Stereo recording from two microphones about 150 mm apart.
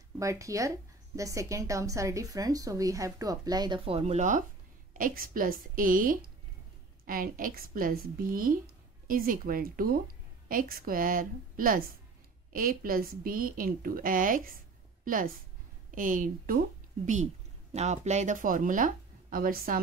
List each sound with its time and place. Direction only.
0.2 s a woman's voice: 20° right (ahead or behind); by 4.5 s 55° right (ahead or behind)
4.9 s a woman's voice: 70° right (ahead or behind)
17.0 s a woman's voice: 55° right (ahead or behind); by 19.8 s 75° right (ahead or behind)